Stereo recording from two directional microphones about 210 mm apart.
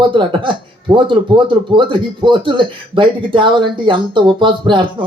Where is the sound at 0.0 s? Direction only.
25° right (ahead or behind).